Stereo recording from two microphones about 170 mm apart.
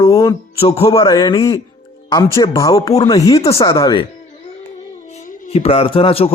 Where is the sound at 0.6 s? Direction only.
35° left (ahead or behind).